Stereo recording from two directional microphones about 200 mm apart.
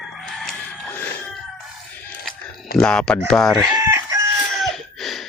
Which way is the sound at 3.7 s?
15° right (ahead or behind).